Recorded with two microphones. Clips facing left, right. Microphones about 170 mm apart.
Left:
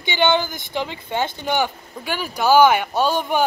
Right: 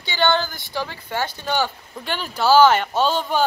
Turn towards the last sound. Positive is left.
turn(degrees=15)  # may be behind; listen again after turning